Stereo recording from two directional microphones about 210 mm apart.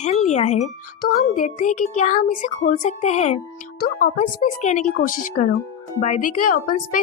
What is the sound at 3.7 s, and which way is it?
Speech, 45° left (ahead or behind).